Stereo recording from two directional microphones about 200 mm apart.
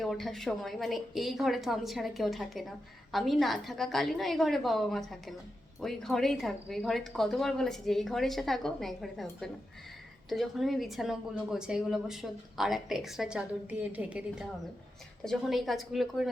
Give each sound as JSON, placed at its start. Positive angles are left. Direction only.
{"t": 0.0, "sound": "speech", "side_deg": 0}
{"t": 10.2, "sound": "speech", "side_deg": 0}